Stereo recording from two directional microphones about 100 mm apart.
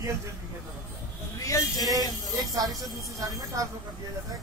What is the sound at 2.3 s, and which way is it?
A woman's voice, 40° right (ahead or behind).